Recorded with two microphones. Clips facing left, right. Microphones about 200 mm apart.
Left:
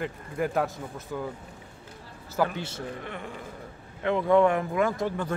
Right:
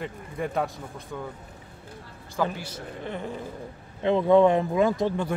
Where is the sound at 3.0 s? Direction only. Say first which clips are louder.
Right 4 dB; 30° right (ahead or behind).